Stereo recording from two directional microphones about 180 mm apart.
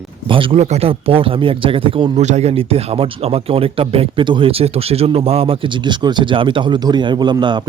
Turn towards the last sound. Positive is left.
turn(degrees=-25)  # may be behind; listen again after turning